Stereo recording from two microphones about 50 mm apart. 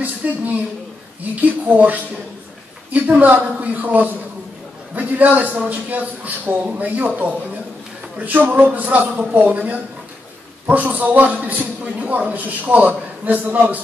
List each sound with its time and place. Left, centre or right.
0.2 s a man's voice: right